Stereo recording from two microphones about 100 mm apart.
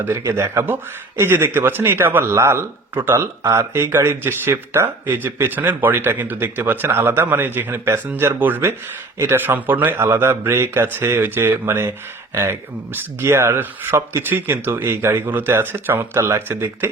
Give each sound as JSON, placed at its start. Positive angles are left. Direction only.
{"t": 0.0, "sound": "a man's voice", "side_deg": -25}